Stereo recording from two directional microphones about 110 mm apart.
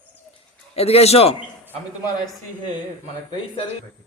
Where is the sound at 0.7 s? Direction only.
65° left (ahead or behind).